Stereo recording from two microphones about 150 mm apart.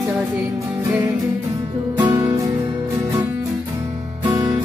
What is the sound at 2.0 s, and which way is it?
Music, 25° right (ahead or behind).